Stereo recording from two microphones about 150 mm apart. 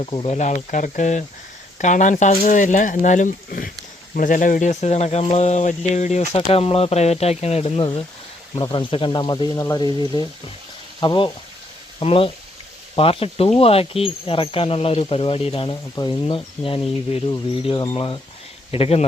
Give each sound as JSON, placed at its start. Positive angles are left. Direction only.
{"t": 0.0, "sound": "speech", "side_deg": 40}
{"t": 0.3, "sound": "speech", "side_deg": 50}
{"t": 8.5, "sound": "speech", "side_deg": 30}